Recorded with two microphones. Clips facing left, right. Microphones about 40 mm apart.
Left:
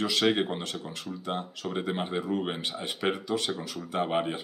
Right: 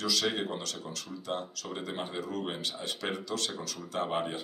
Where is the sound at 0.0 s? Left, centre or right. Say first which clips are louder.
Left 5 dB; left.